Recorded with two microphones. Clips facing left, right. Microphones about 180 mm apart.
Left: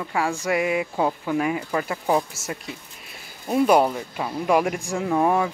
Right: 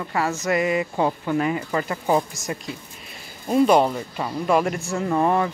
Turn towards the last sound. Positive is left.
turn(degrees=10)  # may be behind; listen again after turning